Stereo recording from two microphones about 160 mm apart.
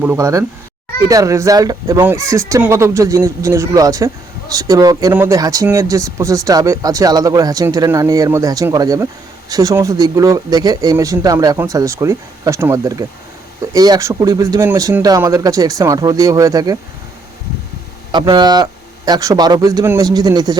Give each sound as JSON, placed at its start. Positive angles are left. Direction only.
{"t": 0.0, "sound": "speech", "side_deg": -15}
{"t": 18.1, "sound": "speech", "side_deg": -30}